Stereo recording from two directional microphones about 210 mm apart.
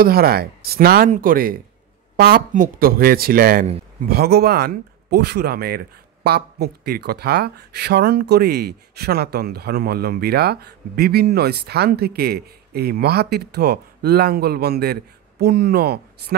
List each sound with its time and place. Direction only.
0.0 s speech: 45° right (ahead or behind)